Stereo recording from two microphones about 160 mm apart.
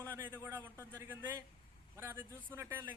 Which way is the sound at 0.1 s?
15° right (ahead or behind).